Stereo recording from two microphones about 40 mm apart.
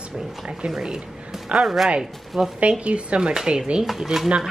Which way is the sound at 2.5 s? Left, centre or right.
Right.